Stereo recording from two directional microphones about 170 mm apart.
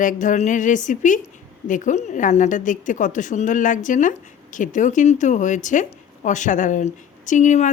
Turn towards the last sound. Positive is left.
turn(degrees=45)  # may be behind; listen again after turning